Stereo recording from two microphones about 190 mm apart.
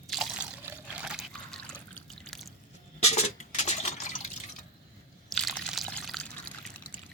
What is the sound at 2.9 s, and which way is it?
Liquid, 35° left (ahead or behind).